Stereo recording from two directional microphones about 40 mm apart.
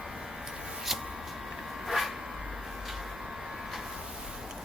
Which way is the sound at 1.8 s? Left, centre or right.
Centre.